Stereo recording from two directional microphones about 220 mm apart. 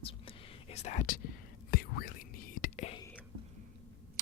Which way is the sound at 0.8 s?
35° left (ahead or behind).